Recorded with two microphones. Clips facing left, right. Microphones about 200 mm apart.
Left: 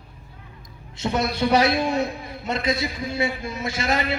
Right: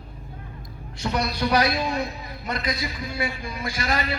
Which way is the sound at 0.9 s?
25° left (ahead or behind).